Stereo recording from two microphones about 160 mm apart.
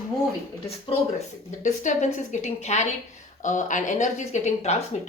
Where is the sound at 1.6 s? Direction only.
50° left (ahead or behind).